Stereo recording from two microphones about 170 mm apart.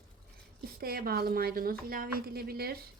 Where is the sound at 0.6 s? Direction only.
65° right (ahead or behind).